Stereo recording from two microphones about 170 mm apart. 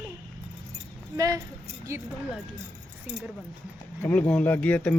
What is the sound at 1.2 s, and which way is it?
Speech, 20° right (ahead or behind).